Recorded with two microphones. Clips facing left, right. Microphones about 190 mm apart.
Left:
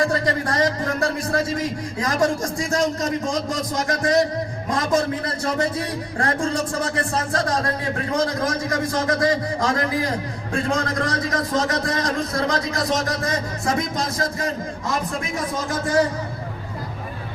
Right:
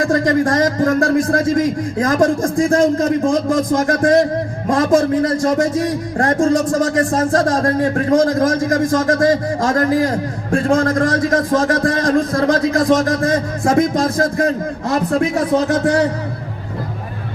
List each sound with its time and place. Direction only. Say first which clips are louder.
0.0 s speech: right 7 dB; 45° right (ahead or behind); by 16.0 s 70° right (ahead or behind)